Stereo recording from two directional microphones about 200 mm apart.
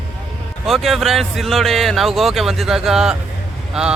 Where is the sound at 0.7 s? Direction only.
Centre (ahead or behind).